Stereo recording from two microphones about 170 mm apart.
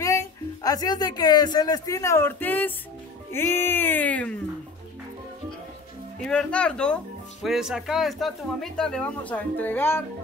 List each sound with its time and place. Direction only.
0.0 s speech: 20° left (ahead or behind)
6.2 s speech: 5° left (ahead or behind)